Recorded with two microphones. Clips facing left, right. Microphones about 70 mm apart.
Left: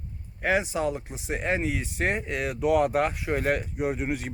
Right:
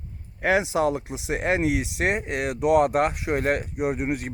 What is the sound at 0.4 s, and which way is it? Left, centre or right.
A man's voice, right.